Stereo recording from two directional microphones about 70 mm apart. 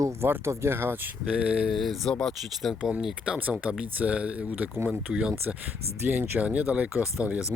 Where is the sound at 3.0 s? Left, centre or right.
Centre.